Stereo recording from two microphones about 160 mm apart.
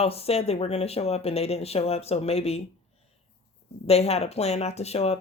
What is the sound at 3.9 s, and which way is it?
Speech, 40° left (ahead or behind).